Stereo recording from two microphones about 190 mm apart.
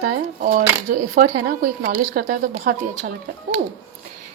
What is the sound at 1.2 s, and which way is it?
A woman's voice, 50° right (ahead or behind).